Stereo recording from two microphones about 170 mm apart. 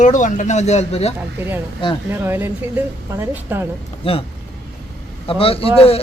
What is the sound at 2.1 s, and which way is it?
A woman's voice, 15° right (ahead or behind).